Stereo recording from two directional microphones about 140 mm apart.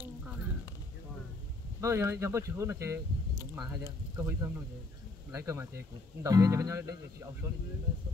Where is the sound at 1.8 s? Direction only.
20° right (ahead or behind).